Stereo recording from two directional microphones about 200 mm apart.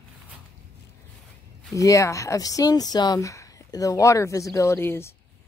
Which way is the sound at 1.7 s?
15° left (ahead or behind).